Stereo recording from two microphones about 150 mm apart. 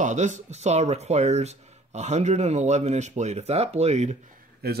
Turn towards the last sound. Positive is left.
turn(degrees=-90)